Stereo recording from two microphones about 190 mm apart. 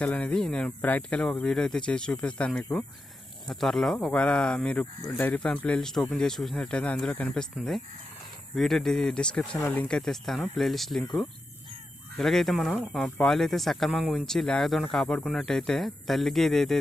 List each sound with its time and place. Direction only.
0.0 s speech: 5° left (ahead or behind)